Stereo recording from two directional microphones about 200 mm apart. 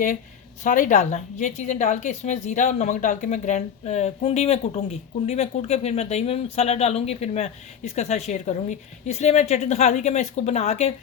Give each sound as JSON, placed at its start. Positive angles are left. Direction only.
{"t": 0.6, "sound": "a woman's voice", "side_deg": 40}